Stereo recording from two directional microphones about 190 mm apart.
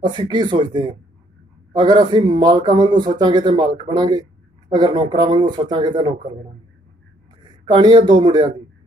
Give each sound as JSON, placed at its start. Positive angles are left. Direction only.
{"t": 0.0, "sound": "speech", "side_deg": -25}
{"t": 7.7, "sound": "speech", "side_deg": -25}